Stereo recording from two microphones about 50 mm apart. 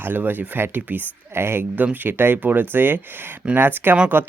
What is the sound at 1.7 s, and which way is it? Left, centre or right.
Speech, right.